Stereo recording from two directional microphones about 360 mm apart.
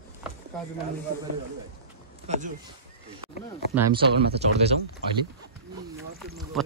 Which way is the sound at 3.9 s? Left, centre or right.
Centre.